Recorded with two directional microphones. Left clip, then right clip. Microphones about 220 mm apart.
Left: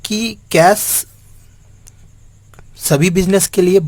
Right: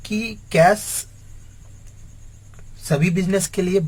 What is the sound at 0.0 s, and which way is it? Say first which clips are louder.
Speech: left 6 dB; 50° left (ahead or behind).